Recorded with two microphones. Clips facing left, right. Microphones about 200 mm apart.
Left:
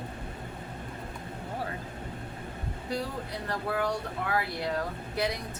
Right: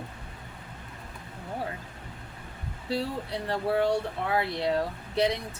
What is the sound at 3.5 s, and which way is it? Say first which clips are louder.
Speech: right 5 dB; 30° right (ahead or behind).